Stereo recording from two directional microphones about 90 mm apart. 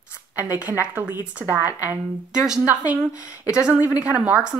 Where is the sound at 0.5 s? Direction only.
20° right (ahead or behind).